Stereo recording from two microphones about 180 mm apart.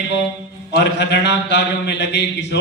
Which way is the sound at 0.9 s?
75° left (ahead or behind).